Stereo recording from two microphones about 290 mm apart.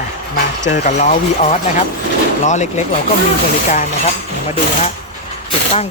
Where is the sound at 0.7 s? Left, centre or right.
Left.